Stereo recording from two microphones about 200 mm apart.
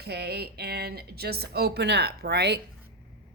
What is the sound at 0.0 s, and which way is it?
A woman's voice, 55° right (ahead or behind).